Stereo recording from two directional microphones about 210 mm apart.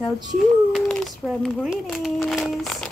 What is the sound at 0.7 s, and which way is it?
Speech, centre (ahead or behind).